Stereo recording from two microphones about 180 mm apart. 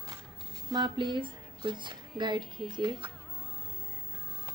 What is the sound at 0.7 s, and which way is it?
A woman's voice, 25° right (ahead or behind).